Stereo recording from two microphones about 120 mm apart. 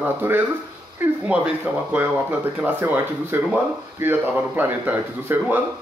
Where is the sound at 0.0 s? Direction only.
15° right (ahead or behind).